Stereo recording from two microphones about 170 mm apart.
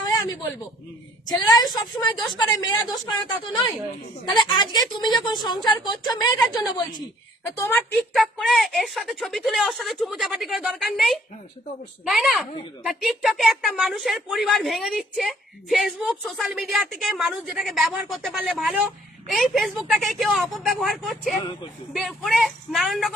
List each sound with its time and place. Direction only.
0.0 s a sound: 20° left (ahead or behind)
1.3 s a woman's voice: 25° left (ahead or behind)
7.6 s a woman's voice: 15° left (ahead or behind)
8.1 s speech: centre (ahead or behind)